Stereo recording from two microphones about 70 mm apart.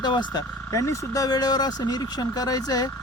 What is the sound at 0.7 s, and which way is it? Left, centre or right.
Speech, left.